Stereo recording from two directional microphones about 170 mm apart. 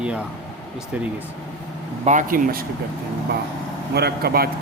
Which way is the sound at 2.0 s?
50° right (ahead or behind).